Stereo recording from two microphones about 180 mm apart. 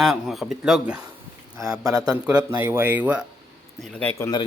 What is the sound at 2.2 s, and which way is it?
Speech, 10° right (ahead or behind).